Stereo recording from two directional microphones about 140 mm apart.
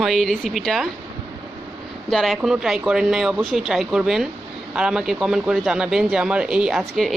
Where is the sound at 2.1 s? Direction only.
Centre (ahead or behind).